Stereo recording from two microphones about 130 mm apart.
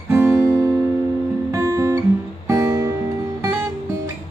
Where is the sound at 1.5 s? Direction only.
25° right (ahead or behind).